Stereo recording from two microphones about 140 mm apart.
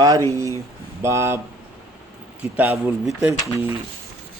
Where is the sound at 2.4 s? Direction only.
10° right (ahead or behind).